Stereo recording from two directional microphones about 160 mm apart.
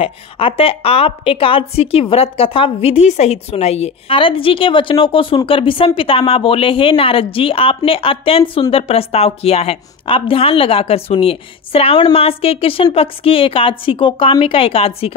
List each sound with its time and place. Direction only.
0.0 s a woman's voice: 35° left (ahead or behind)